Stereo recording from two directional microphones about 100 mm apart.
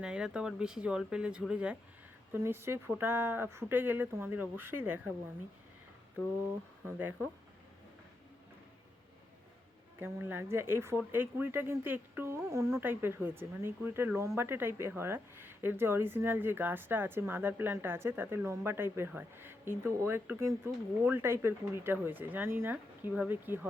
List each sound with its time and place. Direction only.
0.0 s speech: 10° right (ahead or behind)
2.3 s speech: 25° right (ahead or behind)
6.8 s speech: 20° right (ahead or behind)
10.0 s speech: 20° right (ahead or behind)